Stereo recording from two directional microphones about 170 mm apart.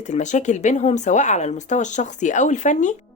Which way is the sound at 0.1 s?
45° left (ahead or behind).